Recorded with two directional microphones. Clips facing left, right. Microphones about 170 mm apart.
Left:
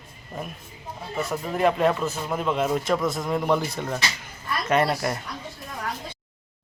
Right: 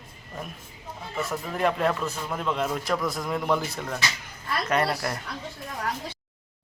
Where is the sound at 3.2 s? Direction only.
Centre (ahead or behind).